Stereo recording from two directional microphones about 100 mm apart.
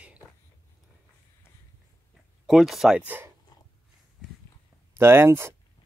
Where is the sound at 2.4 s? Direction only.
Centre (ahead or behind).